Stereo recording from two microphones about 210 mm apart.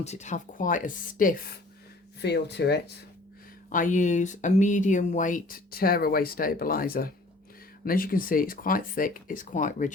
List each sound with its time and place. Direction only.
0.0 s speech: 35° left (ahead or behind)
2.2 s speech: 55° left (ahead or behind)
3.7 s speech: 40° left (ahead or behind)